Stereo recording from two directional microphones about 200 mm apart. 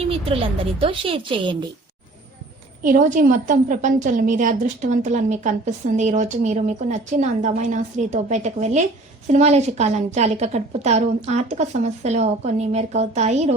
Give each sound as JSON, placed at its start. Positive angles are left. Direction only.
{"t": 0.1, "sound": "speech", "side_deg": -30}
{"t": 2.8, "sound": "a woman's voice", "side_deg": -40}